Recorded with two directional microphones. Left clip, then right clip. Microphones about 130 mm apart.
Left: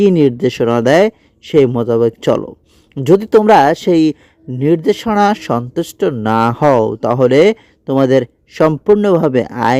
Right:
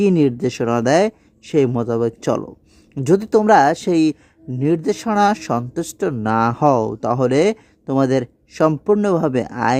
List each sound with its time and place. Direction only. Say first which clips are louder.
0.0 s speech: left 6 dB; 30° left (ahead or behind)